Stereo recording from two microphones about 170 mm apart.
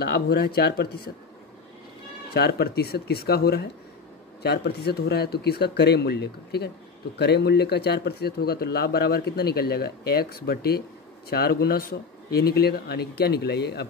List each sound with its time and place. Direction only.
0.0 s speech: 70° left (ahead or behind)
2.3 s speech: 70° left (ahead or behind)